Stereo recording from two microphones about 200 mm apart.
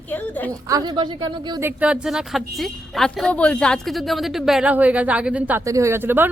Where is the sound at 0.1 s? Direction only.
10° left (ahead or behind).